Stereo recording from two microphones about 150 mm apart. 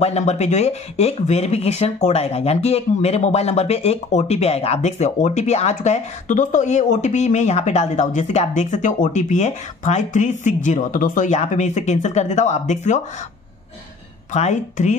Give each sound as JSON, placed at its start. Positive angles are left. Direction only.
{"t": 0.0, "sound": "speech", "side_deg": 45}
{"t": 14.3, "sound": "speech", "side_deg": 50}